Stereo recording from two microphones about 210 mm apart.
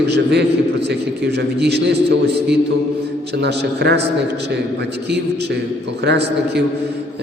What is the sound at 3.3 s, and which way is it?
Speech, 55° right (ahead or behind).